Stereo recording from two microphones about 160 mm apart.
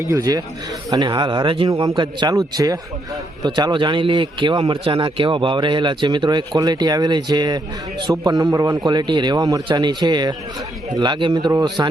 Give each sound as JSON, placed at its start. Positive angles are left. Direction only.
{"t": 0.0, "sound": "a man's voice", "side_deg": -20}
{"t": 3.4, "sound": "a man's voice", "side_deg": -25}